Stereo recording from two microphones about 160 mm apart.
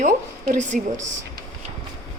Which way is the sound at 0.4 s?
50° right (ahead or behind).